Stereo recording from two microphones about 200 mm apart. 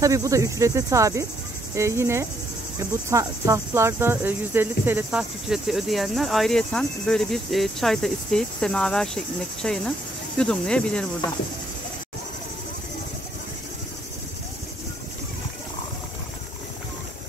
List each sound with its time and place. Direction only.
0.0 s cricket: 15° right (ahead or behind); by 11.1 s 5° left (ahead or behind)